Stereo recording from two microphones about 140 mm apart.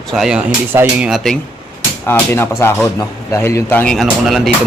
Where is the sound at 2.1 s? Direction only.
15° left (ahead or behind).